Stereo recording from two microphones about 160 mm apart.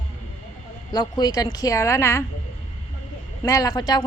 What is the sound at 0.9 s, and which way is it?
A woman's voice, 25° left (ahead or behind).